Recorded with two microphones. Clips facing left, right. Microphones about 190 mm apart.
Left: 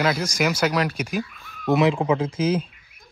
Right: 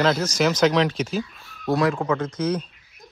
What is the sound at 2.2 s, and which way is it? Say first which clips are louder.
Speech: left 2 dB; 30° left (ahead or behind).